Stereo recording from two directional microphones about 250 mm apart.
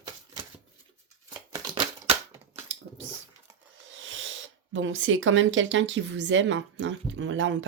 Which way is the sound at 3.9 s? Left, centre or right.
Right.